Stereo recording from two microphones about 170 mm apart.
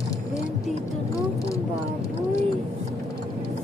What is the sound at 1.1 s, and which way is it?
Vehicle, 20° left (ahead or behind).